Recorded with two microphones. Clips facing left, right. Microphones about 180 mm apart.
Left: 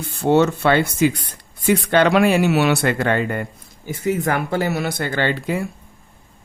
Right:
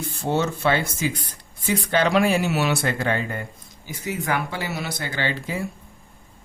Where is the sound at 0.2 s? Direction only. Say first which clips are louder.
Left 8 dB; 65° left (ahead or behind).